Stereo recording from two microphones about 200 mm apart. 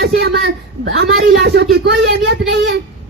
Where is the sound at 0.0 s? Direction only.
55° right (ahead or behind).